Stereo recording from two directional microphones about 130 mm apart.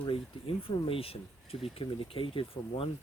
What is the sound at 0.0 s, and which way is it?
Speech, 45° left (ahead or behind).